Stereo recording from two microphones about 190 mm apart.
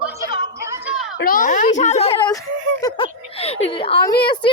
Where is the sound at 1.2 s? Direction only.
45° left (ahead or behind); by 2.3 s 30° left (ahead or behind).